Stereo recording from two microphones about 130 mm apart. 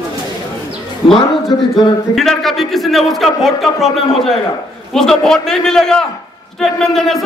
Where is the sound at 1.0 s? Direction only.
45° left (ahead or behind).